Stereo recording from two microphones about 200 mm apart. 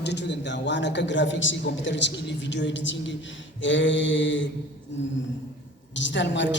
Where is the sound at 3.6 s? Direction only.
65° left (ahead or behind).